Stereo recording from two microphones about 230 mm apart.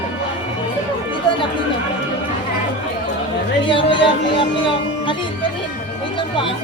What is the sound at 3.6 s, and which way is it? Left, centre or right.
Music, left.